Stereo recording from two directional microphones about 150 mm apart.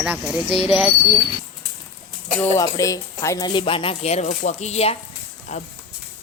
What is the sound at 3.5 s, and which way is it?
Speech, 35° left (ahead or behind).